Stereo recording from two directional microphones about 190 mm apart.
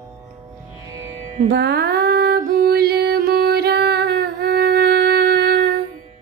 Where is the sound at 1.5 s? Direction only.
60° right (ahead or behind).